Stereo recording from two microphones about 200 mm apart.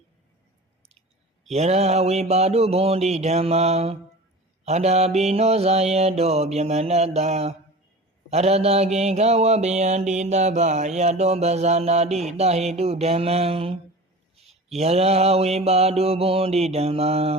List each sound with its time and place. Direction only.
1.5 s mantra: 35° right (ahead or behind)